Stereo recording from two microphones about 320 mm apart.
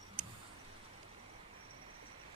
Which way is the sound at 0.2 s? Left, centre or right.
Left.